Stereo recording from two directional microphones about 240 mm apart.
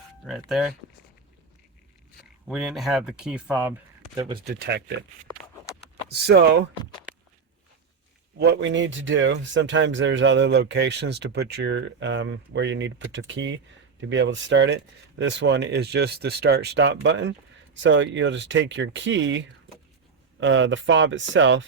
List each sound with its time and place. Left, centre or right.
0.3 s speech: centre
2.5 s speech: centre
4.4 s speech: right
6.1 s speech: right
8.4 s speech: right
20.4 s speech: right